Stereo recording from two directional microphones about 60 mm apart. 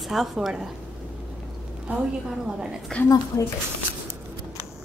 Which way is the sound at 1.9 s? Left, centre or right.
Right.